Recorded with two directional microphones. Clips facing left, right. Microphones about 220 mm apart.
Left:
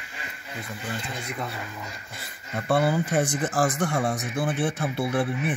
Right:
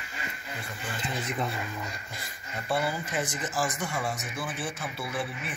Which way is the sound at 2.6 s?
55° left (ahead or behind).